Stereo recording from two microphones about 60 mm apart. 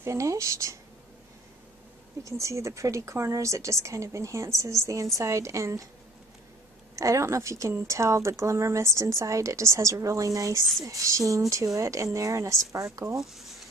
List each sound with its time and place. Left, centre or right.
0.0 s a woman's voice: right
2.2 s a woman's voice: right
7.0 s a woman's voice: right
13.2 s speech: centre